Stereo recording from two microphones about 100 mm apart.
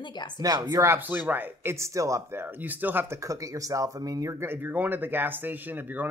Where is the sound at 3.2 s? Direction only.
35° right (ahead or behind).